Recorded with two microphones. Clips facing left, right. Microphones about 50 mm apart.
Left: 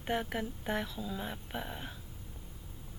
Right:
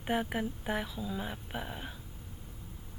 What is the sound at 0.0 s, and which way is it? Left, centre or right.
A woman's voice, centre.